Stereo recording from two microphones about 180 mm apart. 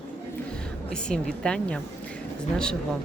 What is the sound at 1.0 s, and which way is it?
Speech, 5° left (ahead or behind).